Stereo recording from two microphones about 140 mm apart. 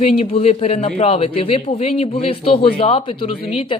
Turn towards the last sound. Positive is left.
turn(degrees=40)  # may be behind; listen again after turning